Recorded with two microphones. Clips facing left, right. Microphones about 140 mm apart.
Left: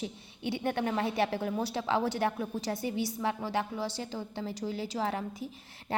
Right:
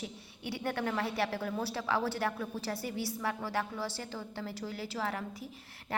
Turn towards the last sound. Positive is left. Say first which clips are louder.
# left 4 dB
turn(degrees=25)  # may be behind; listen again after turning